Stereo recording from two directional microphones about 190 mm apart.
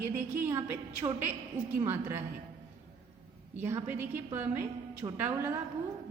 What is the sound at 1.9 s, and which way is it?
Speech, 10° right (ahead or behind).